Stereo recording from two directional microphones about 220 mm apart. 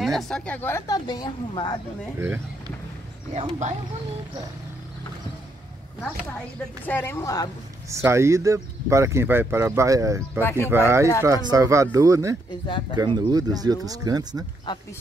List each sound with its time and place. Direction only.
0.0 s speech: centre (ahead or behind); by 1.8 s 20° left (ahead or behind)
2.1 s speech: 10° right (ahead or behind)
3.3 s speech: 30° right (ahead or behind)
6.9 s speech: 10° left (ahead or behind)
7.9 s speech: 10° right (ahead or behind)
14.7 s speech: 20° left (ahead or behind)